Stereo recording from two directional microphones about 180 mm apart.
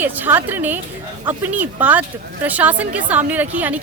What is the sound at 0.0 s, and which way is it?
Speech, 10° right (ahead or behind).